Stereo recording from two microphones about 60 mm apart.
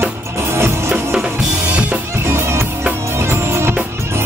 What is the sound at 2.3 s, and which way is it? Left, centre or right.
Music, right.